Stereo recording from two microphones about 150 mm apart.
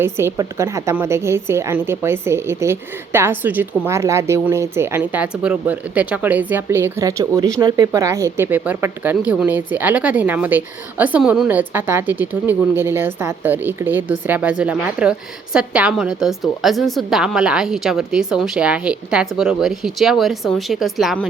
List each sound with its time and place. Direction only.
0.0 s a woman's voice: 15° right (ahead or behind); by 21.2 s centre (ahead or behind)